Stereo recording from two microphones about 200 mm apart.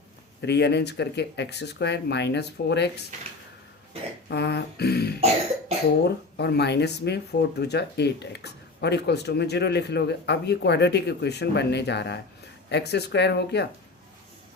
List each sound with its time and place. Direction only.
0.4 s speech: 55° left (ahead or behind)
4.3 s speech: 55° left (ahead or behind)